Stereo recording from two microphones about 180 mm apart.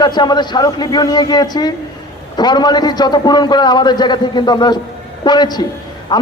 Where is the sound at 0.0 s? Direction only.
25° left (ahead or behind).